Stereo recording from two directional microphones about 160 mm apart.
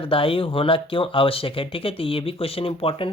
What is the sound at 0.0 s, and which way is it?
Speech, 35° left (ahead or behind).